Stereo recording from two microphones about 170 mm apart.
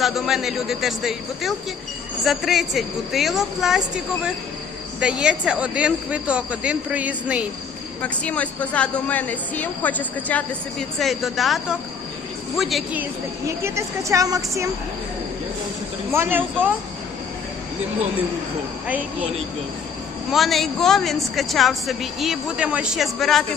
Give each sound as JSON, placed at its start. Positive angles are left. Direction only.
{"t": 0.0, "sound": "speech", "side_deg": 0}
{"t": 8.0, "sound": "a woman's voice", "side_deg": 10}
{"t": 13.7, "sound": "speech", "side_deg": -15}
{"t": 16.1, "sound": "speech", "side_deg": -10}
{"t": 20.3, "sound": "speech", "side_deg": 0}